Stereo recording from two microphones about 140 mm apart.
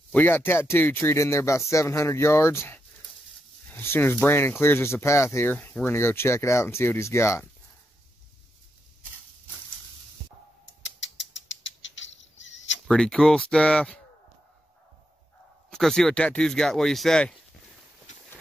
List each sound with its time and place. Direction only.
0.1 s speech: 15° left (ahead or behind)
12.8 s speech: 5° left (ahead or behind)
15.7 s speech: 5° left (ahead or behind)